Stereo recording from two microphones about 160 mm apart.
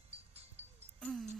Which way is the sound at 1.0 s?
5° left (ahead or behind).